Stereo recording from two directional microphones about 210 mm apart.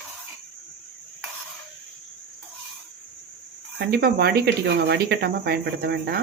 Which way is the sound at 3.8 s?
50° right (ahead or behind).